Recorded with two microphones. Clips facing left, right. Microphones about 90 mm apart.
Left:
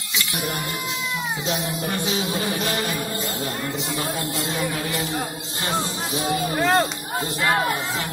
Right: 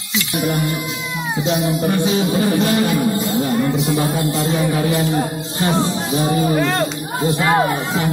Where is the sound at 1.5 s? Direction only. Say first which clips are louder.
Right 8 dB; 25° right (ahead or behind).